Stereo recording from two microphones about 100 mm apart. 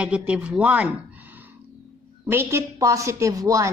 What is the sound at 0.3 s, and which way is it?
Speech, 10° right (ahead or behind).